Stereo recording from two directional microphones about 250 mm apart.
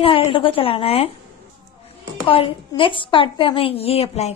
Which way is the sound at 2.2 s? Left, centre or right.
Left.